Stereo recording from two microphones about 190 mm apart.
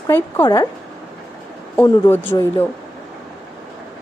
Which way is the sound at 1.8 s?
15° left (ahead or behind).